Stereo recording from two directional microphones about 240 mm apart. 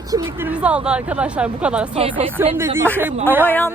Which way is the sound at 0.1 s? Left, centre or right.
Centre.